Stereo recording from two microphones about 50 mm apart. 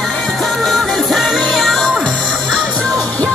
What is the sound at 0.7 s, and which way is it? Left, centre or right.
Music, centre.